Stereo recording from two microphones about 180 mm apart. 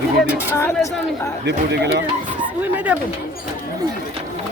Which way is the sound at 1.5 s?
70° right (ahead or behind).